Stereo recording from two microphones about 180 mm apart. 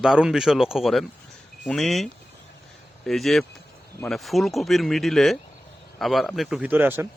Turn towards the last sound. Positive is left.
turn(degrees=-10)  # may be behind; listen again after turning